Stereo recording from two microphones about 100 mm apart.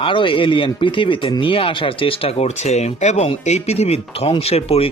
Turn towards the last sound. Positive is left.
turn(degrees=90)